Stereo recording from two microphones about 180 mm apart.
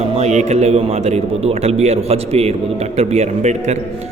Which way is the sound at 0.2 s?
40° right (ahead or behind).